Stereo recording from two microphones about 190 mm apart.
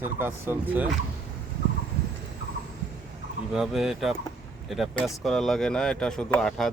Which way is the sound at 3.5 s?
Centre (ahead or behind).